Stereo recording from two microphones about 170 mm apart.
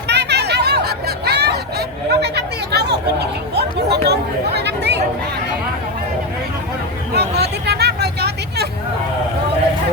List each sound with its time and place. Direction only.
0.1 s chatter: 75° right (ahead or behind)
7.1 s vehicle: 75° right (ahead or behind)